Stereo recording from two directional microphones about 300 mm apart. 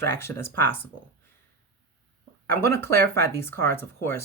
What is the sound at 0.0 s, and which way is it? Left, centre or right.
Speech, centre.